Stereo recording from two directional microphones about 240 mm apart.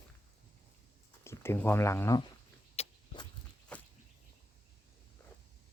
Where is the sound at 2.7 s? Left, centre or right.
Left.